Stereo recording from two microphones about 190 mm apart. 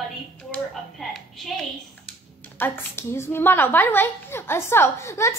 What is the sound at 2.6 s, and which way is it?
A woman's voice, 10° left (ahead or behind).